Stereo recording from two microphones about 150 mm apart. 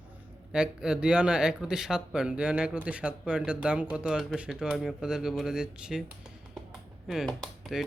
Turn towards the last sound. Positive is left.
turn(degrees=0)  # may be behind; listen again after turning